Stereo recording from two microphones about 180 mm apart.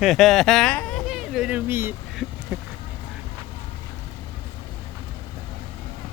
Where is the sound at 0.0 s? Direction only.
Centre (ahead or behind).